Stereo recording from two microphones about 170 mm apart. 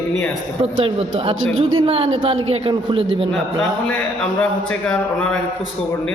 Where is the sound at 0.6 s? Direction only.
35° right (ahead or behind).